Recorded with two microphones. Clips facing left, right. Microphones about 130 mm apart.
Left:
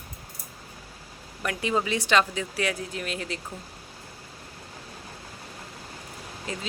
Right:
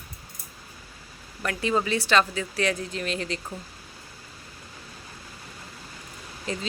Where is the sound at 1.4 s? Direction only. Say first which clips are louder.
Right 1 dB; 15° left (ahead or behind).